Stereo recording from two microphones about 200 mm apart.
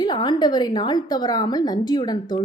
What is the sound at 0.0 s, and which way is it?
A woman's voice, 20° left (ahead or behind).